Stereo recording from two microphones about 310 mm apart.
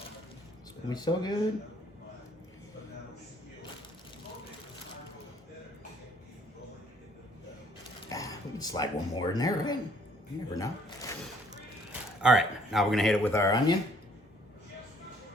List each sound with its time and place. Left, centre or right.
0.9 s speech: centre
8.1 s speech: centre
11.9 s speech: centre